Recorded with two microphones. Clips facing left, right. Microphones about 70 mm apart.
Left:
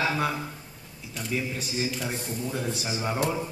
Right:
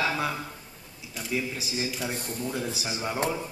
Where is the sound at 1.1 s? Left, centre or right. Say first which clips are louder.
Even; centre.